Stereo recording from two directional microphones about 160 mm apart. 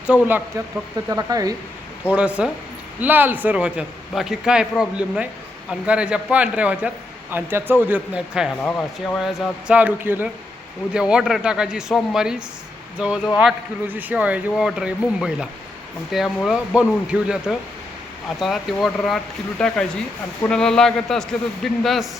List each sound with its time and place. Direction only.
0.1 s a man's voice: 10° right (ahead or behind)
1.1 s speech: 20° right (ahead or behind)
2.1 s a man's voice: 5° right (ahead or behind)
8.6 s speech: 10° left (ahead or behind)
9.1 s a man's voice: centre (ahead or behind)